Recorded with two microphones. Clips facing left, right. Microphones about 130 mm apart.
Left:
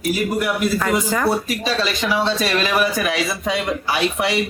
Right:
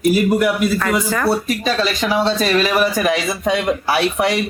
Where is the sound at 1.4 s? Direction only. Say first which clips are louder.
Right 3 dB; 50° right (ahead or behind).